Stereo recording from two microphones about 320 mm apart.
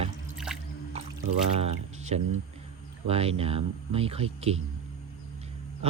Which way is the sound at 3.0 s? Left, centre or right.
Centre.